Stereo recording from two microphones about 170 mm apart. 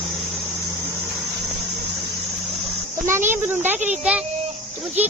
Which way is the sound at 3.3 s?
10° right (ahead or behind).